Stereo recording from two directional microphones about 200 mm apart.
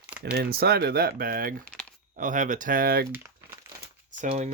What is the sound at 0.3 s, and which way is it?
Speech, 50° right (ahead or behind).